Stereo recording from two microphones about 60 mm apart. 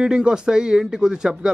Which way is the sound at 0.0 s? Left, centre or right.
Centre.